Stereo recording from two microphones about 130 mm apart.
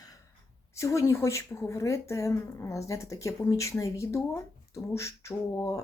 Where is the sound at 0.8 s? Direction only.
25° left (ahead or behind).